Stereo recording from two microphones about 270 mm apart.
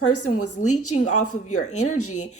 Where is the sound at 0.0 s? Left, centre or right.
Left.